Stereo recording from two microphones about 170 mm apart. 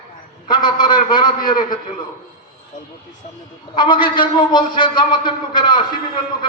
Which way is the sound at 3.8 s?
30° left (ahead or behind).